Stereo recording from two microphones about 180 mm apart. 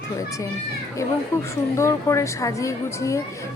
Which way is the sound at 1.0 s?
15° left (ahead or behind).